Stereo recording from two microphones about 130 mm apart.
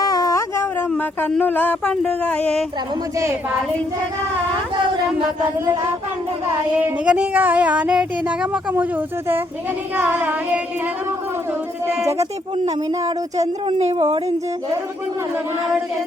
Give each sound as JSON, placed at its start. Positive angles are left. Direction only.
{"t": 0.0, "sound": "a sound", "side_deg": 30}
{"t": 0.9, "sound": "speech", "side_deg": 10}
{"t": 5.4, "sound": "speech", "side_deg": -20}
{"t": 6.7, "sound": "speech", "side_deg": -10}
{"t": 12.9, "sound": "speech", "side_deg": -30}
{"t": 13.7, "sound": "speech", "side_deg": -50}